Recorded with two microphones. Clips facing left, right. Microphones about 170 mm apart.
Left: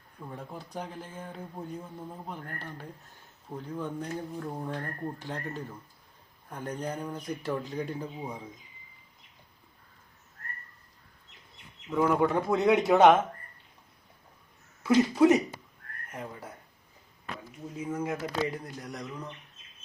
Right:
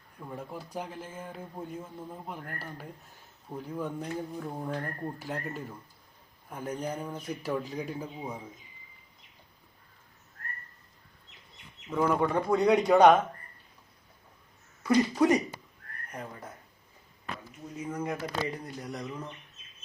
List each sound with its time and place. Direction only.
0.3 s speech: 5° right (ahead or behind)
11.9 s speech: 5° left (ahead or behind)
14.8 s speech: 5° left (ahead or behind)
17.8 s speech: 5° left (ahead or behind)